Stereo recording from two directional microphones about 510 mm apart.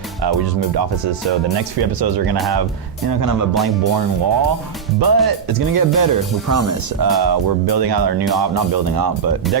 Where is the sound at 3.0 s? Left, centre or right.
Right.